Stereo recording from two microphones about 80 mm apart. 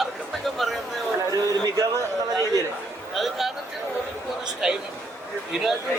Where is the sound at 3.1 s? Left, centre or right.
Centre.